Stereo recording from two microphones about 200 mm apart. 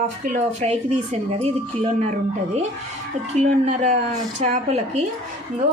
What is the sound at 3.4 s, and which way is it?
A woman's voice, 35° right (ahead or behind).